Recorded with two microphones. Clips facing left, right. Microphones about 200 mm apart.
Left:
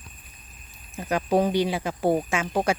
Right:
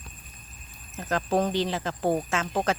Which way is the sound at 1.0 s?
10° left (ahead or behind).